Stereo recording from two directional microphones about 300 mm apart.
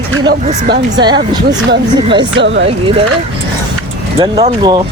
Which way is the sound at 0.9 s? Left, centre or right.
Centre.